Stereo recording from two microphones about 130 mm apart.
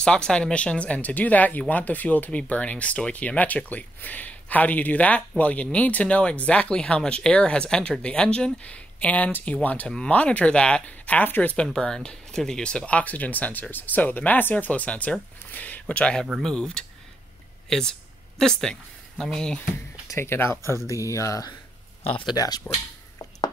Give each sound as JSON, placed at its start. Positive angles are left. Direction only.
{"t": 0.0, "sound": "speech", "side_deg": 5}
{"t": 20.1, "sound": "speech", "side_deg": 20}